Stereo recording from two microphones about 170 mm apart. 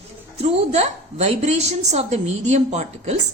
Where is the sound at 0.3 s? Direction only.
40° right (ahead or behind).